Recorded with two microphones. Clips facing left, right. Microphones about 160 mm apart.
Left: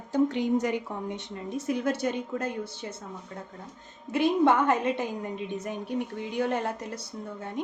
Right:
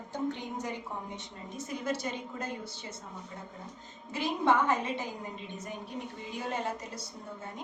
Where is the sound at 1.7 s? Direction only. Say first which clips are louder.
Left 7 dB; 65° left (ahead or behind).